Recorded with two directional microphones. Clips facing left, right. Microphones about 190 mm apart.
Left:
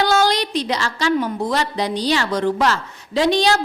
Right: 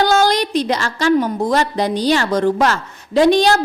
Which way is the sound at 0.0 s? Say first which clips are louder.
Right 3 dB; 45° right (ahead or behind).